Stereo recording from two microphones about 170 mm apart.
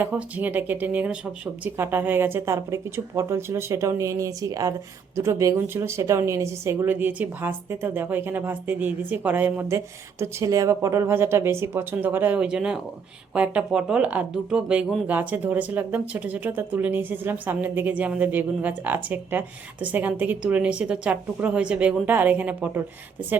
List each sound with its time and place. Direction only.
0.0 s speech: 10° right (ahead or behind)